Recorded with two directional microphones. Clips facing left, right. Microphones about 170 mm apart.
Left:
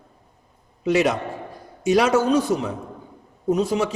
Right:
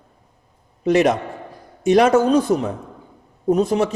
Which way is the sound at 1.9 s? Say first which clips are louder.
Right 4 dB; 50° right (ahead or behind).